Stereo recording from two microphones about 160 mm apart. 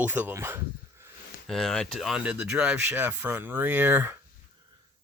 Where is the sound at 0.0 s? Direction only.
10° right (ahead or behind).